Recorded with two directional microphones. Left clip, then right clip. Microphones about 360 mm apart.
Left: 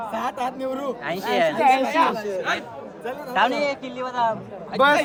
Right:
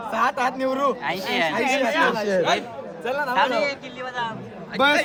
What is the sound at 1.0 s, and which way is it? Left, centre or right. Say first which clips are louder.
Speech: left 2 dB; centre.